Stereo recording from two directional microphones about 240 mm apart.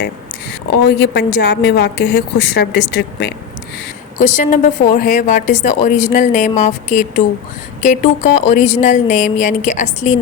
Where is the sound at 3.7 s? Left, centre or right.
Left.